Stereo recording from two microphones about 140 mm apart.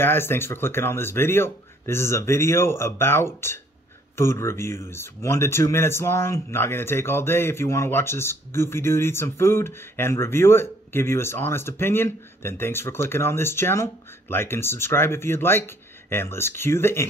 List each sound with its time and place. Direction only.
0.0 s speech: 15° left (ahead or behind)